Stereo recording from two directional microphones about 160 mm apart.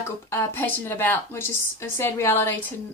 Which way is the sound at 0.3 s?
15° left (ahead or behind).